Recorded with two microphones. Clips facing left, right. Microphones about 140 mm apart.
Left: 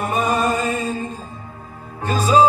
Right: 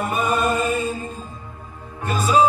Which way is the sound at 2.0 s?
35° left (ahead or behind).